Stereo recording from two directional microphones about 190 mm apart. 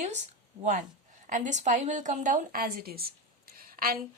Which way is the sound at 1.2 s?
40° right (ahead or behind).